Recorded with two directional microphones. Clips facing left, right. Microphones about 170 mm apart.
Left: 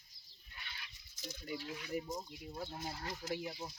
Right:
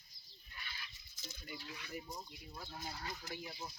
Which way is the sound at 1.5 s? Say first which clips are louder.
Left 7 dB; 50° left (ahead or behind).